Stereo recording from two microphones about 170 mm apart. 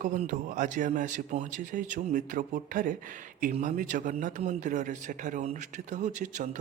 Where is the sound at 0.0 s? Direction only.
50° right (ahead or behind).